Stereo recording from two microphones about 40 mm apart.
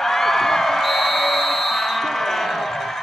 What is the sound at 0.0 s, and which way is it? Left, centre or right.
Music, centre.